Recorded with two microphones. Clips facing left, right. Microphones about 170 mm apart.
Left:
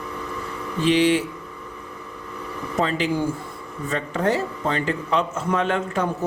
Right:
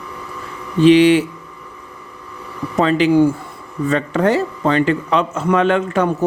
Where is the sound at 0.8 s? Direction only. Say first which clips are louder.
Right 9 dB; 75° right (ahead or behind).